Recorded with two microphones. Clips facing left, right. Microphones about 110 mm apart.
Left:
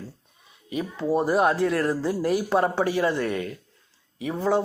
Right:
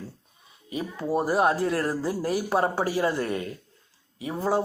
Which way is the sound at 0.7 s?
35° right (ahead or behind).